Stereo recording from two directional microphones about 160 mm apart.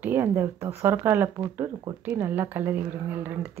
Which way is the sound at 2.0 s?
15° right (ahead or behind).